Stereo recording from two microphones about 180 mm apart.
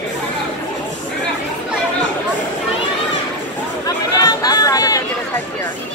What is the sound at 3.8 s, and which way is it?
Chatter, 20° left (ahead or behind).